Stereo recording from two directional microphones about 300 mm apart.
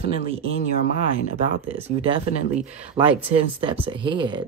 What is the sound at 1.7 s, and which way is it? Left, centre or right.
Speech, centre.